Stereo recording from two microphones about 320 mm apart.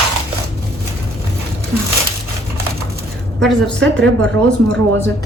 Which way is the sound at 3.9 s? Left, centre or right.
Right.